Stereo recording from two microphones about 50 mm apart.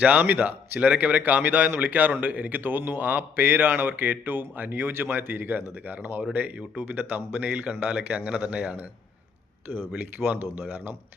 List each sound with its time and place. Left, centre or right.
0.0 s a man's voice: right
7.4 s a man's voice: right
10.2 s speech: right